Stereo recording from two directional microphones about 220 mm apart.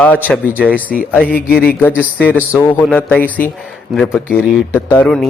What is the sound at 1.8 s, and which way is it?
A man's voice, 10° left (ahead or behind).